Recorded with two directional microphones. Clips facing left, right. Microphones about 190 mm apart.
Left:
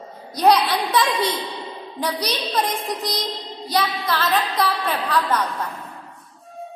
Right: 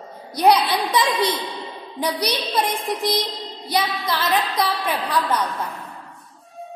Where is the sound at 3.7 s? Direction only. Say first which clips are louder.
Left 1 dB; 10° right (ahead or behind).